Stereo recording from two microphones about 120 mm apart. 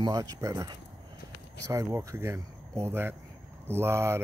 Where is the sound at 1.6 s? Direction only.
25° right (ahead or behind).